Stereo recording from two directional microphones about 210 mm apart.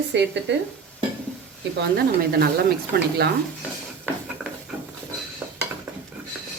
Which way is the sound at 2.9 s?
45° right (ahead or behind).